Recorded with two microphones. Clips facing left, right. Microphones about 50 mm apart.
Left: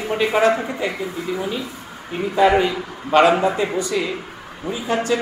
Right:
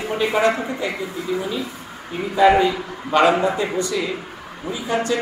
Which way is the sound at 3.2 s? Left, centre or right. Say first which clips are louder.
Left 1 dB; centre.